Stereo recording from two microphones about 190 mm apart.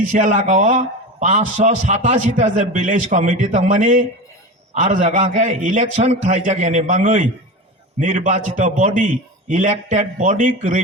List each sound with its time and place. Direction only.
0.1 s a man's voice: 40° right (ahead or behind)